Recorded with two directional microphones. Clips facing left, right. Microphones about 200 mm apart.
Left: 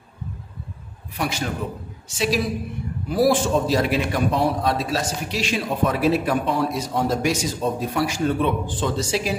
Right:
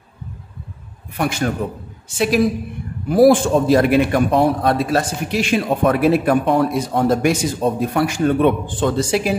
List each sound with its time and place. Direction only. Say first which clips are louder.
1.1 s a man's voice: right 6 dB; 55° right (ahead or behind)